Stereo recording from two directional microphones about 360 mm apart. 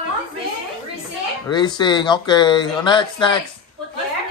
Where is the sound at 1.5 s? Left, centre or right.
Centre.